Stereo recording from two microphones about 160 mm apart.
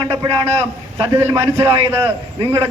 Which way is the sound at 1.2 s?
20° right (ahead or behind).